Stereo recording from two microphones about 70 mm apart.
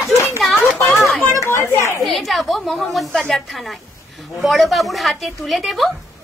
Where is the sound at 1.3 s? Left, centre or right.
Left.